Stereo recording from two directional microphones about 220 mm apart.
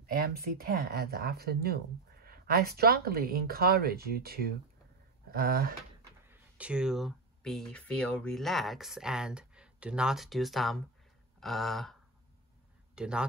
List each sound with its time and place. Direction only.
0.0 s speech: 40° right (ahead or behind)
6.2 s speech: 10° right (ahead or behind)
11.3 s a sound: centre (ahead or behind)
12.9 s speech: 5° right (ahead or behind)